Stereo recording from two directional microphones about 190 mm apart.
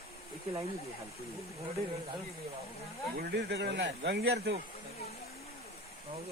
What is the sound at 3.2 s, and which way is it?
Speech, 60° right (ahead or behind).